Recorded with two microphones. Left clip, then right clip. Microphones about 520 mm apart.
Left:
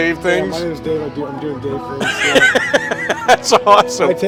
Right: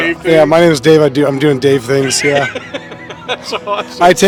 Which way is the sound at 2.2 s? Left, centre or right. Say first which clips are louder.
Left 2 dB; left.